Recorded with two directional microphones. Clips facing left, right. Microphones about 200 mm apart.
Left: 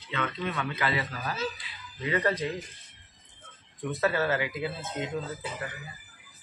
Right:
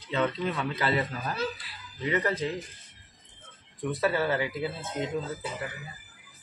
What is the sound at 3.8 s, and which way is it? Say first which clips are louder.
Speech: even; 30° right (ahead or behind).